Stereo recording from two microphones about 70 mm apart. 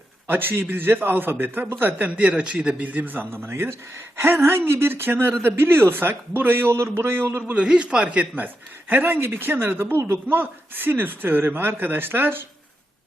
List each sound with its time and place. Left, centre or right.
0.3 s a man's voice: right
7.5 s speech: centre; by 12.5 s right